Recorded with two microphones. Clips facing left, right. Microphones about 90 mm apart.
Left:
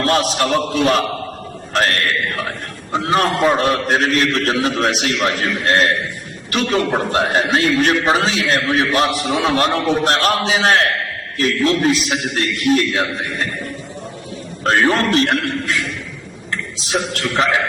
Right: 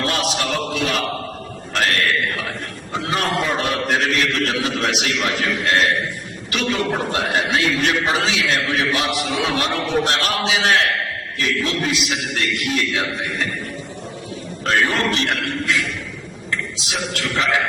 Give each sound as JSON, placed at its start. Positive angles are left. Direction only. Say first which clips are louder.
{"t": 0.0, "sound": "a man's voice", "louder": "left 5 dB", "side_deg": 40}
{"t": 14.6, "sound": "a man's voice", "louder": "left 4 dB", "side_deg": 35}
{"t": 16.8, "sound": "a man's voice", "louder": "left 4 dB", "side_deg": 40}